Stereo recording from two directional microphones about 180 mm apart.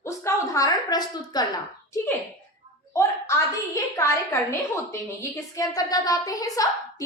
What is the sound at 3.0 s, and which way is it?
A woman's voice, 15° left (ahead or behind).